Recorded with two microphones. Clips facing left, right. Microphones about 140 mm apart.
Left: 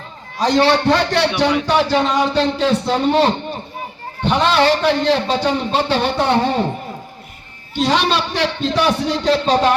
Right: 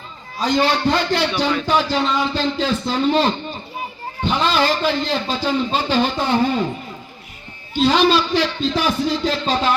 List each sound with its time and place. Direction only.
0.3 s a man's voice: 80° left
7.7 s a man's voice: 75° left (ahead or behind)